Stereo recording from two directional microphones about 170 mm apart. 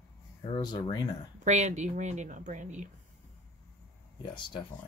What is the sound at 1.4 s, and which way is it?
A woman's voice, 45° right (ahead or behind).